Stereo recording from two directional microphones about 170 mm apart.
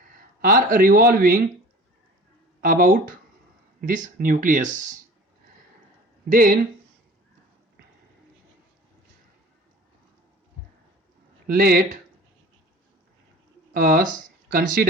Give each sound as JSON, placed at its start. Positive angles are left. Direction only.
{"t": 0.4, "sound": "a man's voice", "side_deg": -55}
{"t": 2.6, "sound": "a man's voice", "side_deg": -55}
{"t": 6.2, "sound": "a man's voice", "side_deg": -55}
{"t": 11.4, "sound": "a man's voice", "side_deg": -65}
{"t": 13.7, "sound": "a man's voice", "side_deg": -60}